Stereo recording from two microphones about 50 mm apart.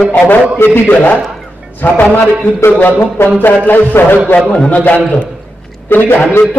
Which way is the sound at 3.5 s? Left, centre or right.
Left.